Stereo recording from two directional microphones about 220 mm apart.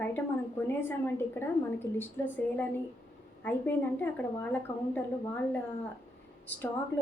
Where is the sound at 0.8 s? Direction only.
10° left (ahead or behind).